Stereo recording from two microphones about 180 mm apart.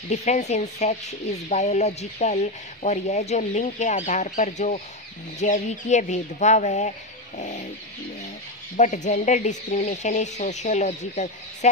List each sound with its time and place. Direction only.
0.1 s speech: 40° left (ahead or behind)
8.7 s speech: 40° left (ahead or behind)